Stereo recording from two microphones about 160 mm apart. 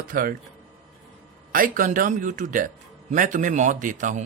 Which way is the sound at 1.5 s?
60° right (ahead or behind).